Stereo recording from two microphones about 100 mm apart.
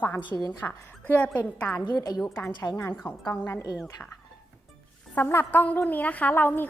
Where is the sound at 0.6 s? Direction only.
15° left (ahead or behind).